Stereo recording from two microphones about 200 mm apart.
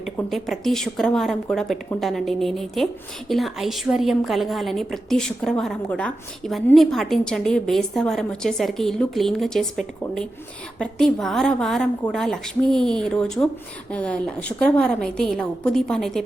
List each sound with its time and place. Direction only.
0.0 s a woman's voice: centre (ahead or behind)